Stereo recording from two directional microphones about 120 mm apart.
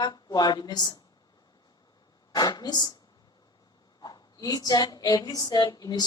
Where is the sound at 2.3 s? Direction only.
35° left (ahead or behind).